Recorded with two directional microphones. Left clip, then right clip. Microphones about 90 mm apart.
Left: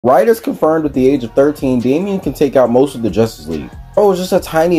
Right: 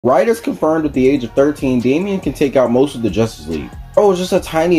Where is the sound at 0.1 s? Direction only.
40° left (ahead or behind).